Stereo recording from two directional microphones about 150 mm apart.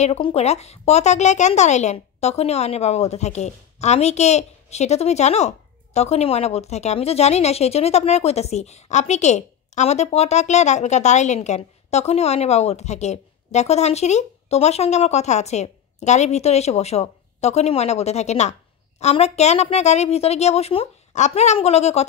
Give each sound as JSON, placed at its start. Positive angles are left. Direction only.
{"t": 0.0, "sound": "speech", "side_deg": 45}